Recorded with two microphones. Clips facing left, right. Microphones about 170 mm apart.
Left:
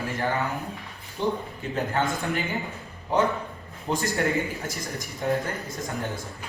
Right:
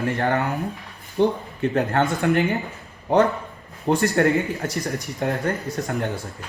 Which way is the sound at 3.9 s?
65° right (ahead or behind).